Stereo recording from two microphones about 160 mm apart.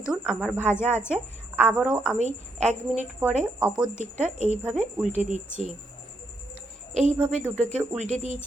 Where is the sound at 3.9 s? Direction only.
45° left (ahead or behind).